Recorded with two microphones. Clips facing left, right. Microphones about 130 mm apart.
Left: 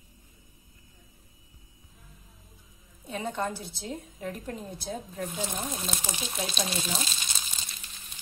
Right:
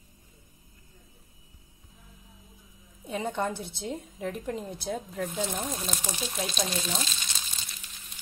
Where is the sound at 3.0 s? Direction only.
25° right (ahead or behind).